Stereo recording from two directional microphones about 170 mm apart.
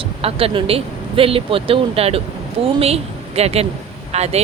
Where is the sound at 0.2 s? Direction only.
35° right (ahead or behind).